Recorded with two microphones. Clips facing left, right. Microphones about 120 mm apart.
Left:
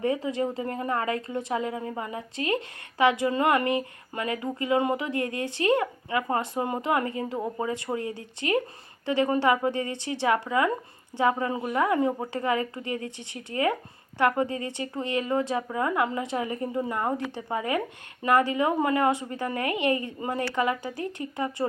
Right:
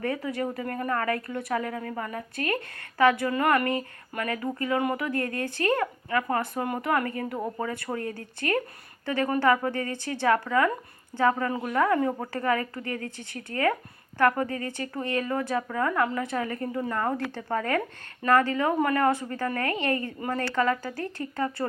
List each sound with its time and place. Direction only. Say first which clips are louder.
0.0 s speech: left 3 dB; 20° left (ahead or behind)